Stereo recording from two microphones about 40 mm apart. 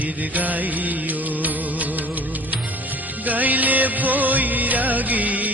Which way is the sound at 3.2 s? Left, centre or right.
Right.